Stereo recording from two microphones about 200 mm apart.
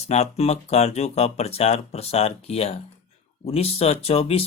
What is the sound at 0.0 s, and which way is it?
Speech, 35° left (ahead or behind).